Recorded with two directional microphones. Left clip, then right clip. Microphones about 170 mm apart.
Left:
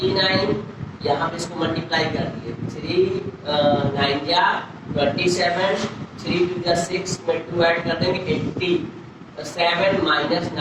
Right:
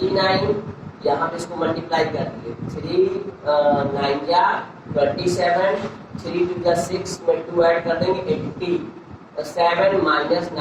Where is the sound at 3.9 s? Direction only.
20° left (ahead or behind).